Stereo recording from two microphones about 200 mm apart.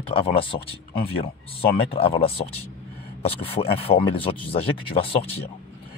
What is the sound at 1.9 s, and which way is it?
Speech, 30° left (ahead or behind).